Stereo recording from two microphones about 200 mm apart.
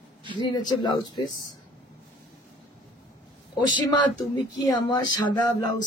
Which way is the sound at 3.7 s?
20° left (ahead or behind).